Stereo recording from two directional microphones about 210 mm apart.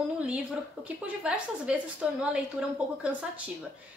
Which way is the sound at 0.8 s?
5° right (ahead or behind).